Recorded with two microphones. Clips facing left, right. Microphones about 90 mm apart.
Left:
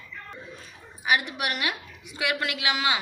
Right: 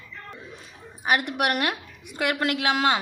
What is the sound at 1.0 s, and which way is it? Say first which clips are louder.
A woman's voice: right 3 dB; 50° right (ahead or behind).